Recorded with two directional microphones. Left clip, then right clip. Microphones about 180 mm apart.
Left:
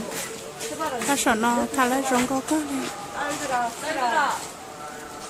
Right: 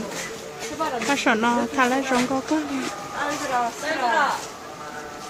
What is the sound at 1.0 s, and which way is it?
A woman's voice, 15° left (ahead or behind).